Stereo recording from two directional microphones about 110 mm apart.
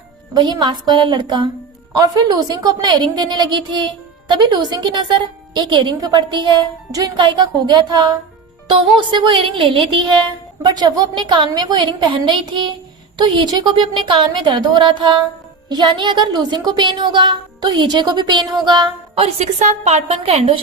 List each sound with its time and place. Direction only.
0.3 s a woman's voice: 45° right (ahead or behind)
19.1 s a woman's voice: 65° right (ahead or behind)